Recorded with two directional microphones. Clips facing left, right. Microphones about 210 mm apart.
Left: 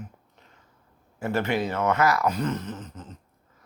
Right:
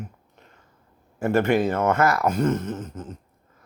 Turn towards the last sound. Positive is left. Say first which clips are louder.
# right 6 dB
turn(degrees=-50)  # may be behind; listen again after turning